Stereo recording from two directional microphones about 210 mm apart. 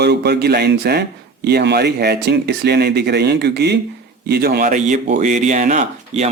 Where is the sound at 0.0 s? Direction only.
50° right (ahead or behind).